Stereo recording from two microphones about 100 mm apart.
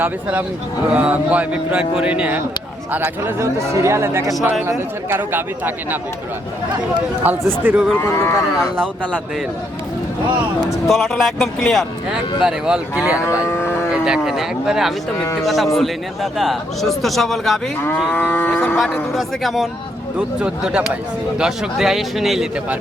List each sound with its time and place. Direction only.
0.0 s speech: 15° right (ahead or behind)
7.3 s speech: 20° right (ahead or behind)
7.9 s cattle: 25° left (ahead or behind)
10.8 s a man's voice: centre (ahead or behind)
13.4 s moo: 25° left (ahead or behind)
13.9 s a man's voice: 5° right (ahead or behind)
17.8 s moo: 20° left (ahead or behind)
19.1 s a man's voice: centre (ahead or behind)
20.1 s a man's voice: 10° right (ahead or behind)